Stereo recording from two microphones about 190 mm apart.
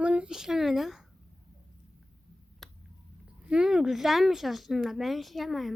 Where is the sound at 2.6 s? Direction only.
Centre (ahead or behind).